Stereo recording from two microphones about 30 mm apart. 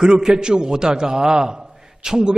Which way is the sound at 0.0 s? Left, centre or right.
Right.